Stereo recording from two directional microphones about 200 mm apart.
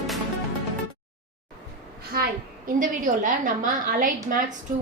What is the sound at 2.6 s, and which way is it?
A woman's voice, 40° right (ahead or behind).